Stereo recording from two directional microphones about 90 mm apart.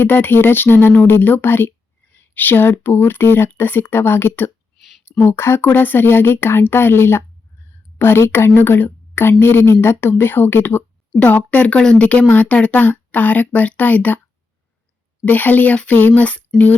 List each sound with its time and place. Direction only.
0.0 s speech: 25° left (ahead or behind)
2.1 s a sound: 20° left (ahead or behind)
2.8 s speech: 25° left (ahead or behind)
15.2 s speech: 20° left (ahead or behind)